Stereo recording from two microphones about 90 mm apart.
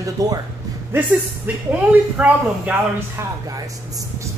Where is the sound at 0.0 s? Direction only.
40° right (ahead or behind).